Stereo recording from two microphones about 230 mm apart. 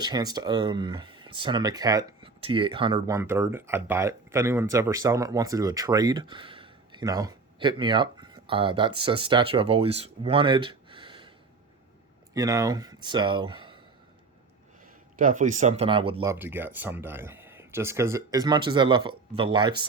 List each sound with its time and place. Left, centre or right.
0.0 s speech: centre
3.2 s speech: centre
12.3 s speech: centre
15.2 s speech: right
16.3 s speech: centre